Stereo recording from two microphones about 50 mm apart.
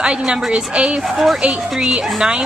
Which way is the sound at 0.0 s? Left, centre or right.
Centre.